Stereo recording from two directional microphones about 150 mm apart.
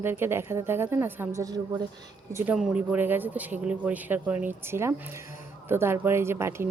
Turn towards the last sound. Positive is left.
turn(degrees=-15)  # may be behind; listen again after turning